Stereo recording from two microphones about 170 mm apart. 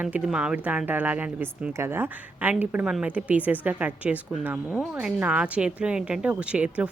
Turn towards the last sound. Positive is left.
turn(degrees=-5)  # may be behind; listen again after turning